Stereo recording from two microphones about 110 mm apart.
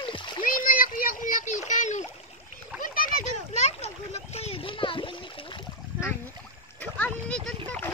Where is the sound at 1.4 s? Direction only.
90° left.